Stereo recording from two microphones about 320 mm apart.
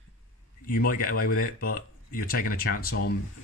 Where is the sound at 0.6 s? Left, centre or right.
Left.